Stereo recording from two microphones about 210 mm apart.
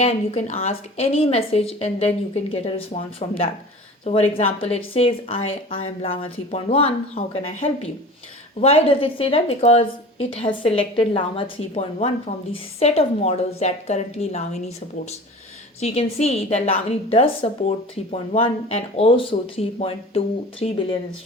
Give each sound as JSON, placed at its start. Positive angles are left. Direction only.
{"t": 0.0, "sound": "a woman's voice", "side_deg": 30}
{"t": 15.8, "sound": "a woman's voice", "side_deg": 30}